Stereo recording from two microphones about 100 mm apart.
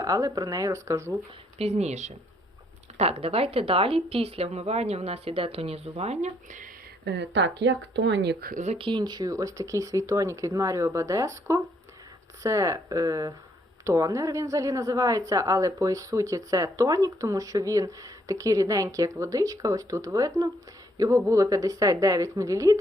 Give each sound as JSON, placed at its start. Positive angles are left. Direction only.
{"t": 0.0, "sound": "a woman's voice", "side_deg": -35}
{"t": 1.5, "sound": "speech", "side_deg": -90}
{"t": 3.0, "sound": "a woman's voice", "side_deg": -85}
{"t": 8.9, "sound": "a woman's voice", "side_deg": -45}